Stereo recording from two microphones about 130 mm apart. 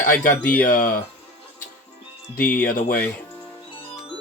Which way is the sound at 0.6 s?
90° left.